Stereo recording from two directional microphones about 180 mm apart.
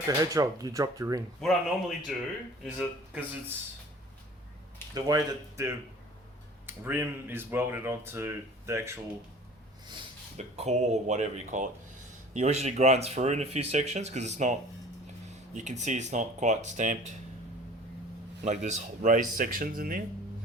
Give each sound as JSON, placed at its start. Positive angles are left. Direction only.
{"t": 0.2, "sound": "speech", "side_deg": -20}
{"t": 1.4, "sound": "speech", "side_deg": 0}
{"t": 4.9, "sound": "speech", "side_deg": -20}
{"t": 10.3, "sound": "speech", "side_deg": -40}
{"t": 18.4, "sound": "speech", "side_deg": -40}